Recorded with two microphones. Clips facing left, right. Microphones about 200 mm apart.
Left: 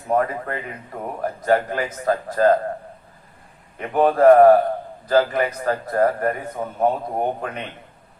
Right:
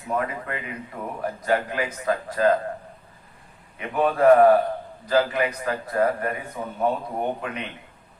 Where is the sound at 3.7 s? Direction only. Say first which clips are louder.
Left 5 dB; 40° left (ahead or behind).